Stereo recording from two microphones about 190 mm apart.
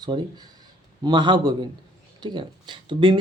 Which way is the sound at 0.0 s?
20° right (ahead or behind).